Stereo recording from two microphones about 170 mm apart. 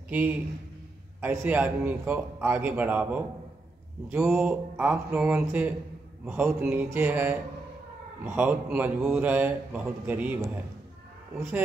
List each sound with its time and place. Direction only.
0.1 s a man's voice: 10° right (ahead or behind)